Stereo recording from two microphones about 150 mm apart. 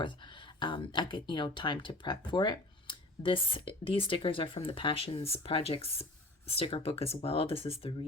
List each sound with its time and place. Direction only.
0.0 s speech: 30° left (ahead or behind)